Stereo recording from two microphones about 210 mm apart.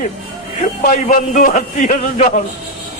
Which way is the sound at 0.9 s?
35° left (ahead or behind).